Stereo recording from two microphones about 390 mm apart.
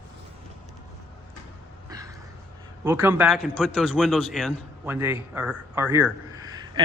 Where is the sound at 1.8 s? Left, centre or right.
Centre.